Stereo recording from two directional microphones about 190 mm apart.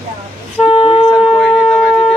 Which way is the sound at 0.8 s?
35° left (ahead or behind).